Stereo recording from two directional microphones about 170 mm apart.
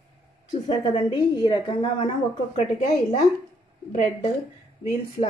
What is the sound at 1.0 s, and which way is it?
Speech, 30° left (ahead or behind).